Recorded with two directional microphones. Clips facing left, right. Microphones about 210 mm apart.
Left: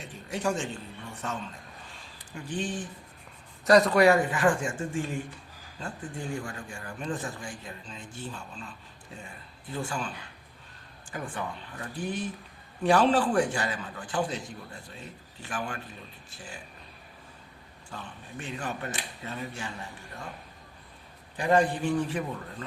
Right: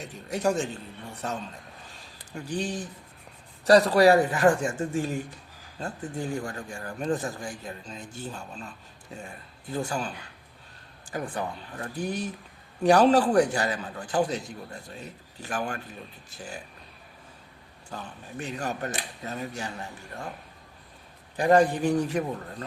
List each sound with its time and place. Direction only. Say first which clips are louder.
0.3 s a man's voice: right 4 dB; 40° right (ahead or behind)
6.4 s speech: right 4 dB; 40° right (ahead or behind)
9.7 s speech: right 3 dB; 40° right (ahead or behind)
11.1 s speech: right 4 dB; 40° right (ahead or behind)
15.4 s speech: right 4 dB; 40° right (ahead or behind)
18.4 s speech: right 3 dB; 40° right (ahead or behind)
21.3 s speech: right 4 dB; 40° right (ahead or behind)